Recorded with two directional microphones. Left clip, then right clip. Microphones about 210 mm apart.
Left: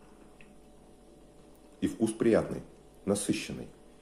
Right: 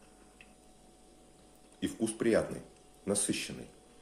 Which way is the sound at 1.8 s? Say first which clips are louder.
Left 4 dB; centre (ahead or behind).